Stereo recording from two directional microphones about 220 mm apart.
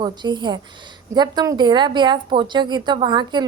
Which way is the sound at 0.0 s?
20° right (ahead or behind).